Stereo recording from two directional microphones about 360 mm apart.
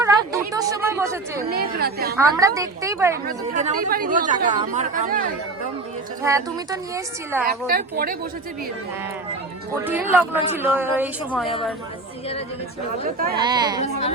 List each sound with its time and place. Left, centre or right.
0.0 s a sound: centre
1.4 s speech: right
2.1 s a woman's voice: centre
3.2 s speech: right
6.2 s a woman's voice: centre
7.4 s speech: right
9.7 s a woman's voice: centre
13.1 s speech: right
13.4 s a woman's voice: centre